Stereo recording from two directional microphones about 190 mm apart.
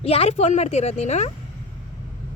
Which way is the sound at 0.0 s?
30° left (ahead or behind).